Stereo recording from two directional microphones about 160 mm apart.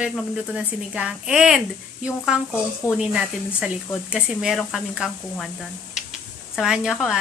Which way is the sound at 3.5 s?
5° right (ahead or behind).